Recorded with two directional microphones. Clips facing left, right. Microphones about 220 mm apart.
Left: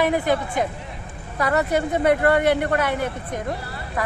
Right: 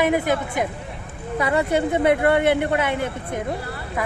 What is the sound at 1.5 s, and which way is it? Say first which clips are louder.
Speech: right 1 dB; 25° right (ahead or behind).